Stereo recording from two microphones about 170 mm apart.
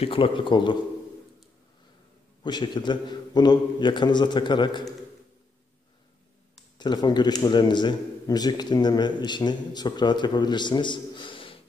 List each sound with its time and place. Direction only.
0.0 s a man's voice: 30° left (ahead or behind)
2.4 s a man's voice: 25° left (ahead or behind)
6.8 s a man's voice: 25° left (ahead or behind)